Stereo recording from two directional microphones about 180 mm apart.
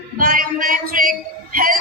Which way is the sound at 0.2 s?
55° right (ahead or behind).